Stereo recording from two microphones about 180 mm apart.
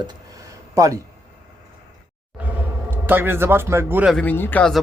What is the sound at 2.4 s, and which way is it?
Speech, 10° right (ahead or behind).